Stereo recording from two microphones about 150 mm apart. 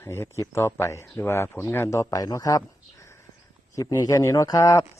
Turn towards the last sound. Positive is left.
turn(degrees=25)  # may be behind; listen again after turning